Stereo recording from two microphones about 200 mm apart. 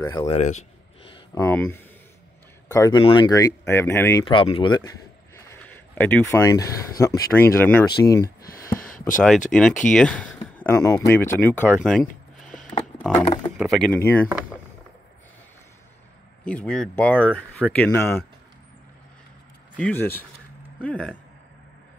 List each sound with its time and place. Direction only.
0.0 s speech: 20° left (ahead or behind)
0.4 s speech: 35° left (ahead or behind)
1.1 s speech: 15° left (ahead or behind)
2.7 s speech: 20° left (ahead or behind)
4.3 s speech: 25° left (ahead or behind)
8.6 s a sound: 5° left (ahead or behind)
9.5 s speech: 5° left (ahead or behind)
13.2 s speech: 30° left (ahead or behind)
13.6 s speech: centre (ahead or behind)
16.4 s speech: 5° left (ahead or behind)
19.8 s speech: 10° left (ahead or behind)